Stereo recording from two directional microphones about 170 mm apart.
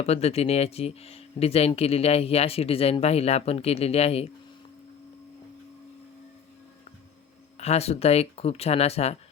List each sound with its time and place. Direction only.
0.0 s speech: 40° left (ahead or behind)
7.6 s speech: 40° left (ahead or behind)